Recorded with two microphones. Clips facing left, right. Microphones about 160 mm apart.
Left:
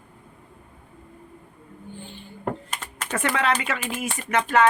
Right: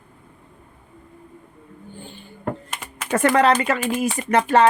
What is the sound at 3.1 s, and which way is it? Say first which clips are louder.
Speech: right 7 dB; 40° right (ahead or behind).